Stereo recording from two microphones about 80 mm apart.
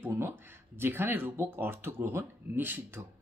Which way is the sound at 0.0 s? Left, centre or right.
Right.